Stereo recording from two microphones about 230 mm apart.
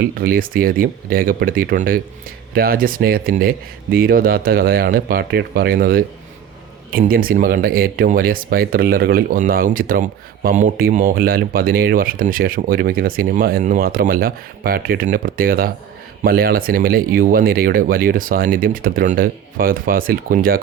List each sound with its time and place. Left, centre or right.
0.2 s speech: right